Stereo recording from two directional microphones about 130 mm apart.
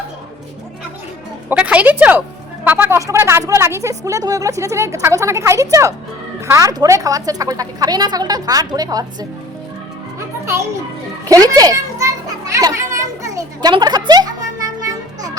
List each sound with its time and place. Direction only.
1.5 s a woman's voice: 10° right (ahead or behind); by 9.0 s 30° right (ahead or behind)
10.2 s music: 20° right (ahead or behind)
11.3 s a child's voice: 30° right (ahead or behind)
12.5 s children playing: 25° right (ahead or behind)